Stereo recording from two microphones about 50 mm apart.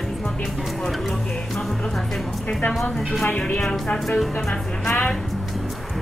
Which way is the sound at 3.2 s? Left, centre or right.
Left.